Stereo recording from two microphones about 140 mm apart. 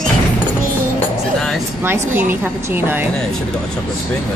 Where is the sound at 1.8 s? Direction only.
15° right (ahead or behind).